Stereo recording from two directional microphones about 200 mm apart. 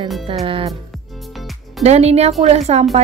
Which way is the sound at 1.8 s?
30° right (ahead or behind).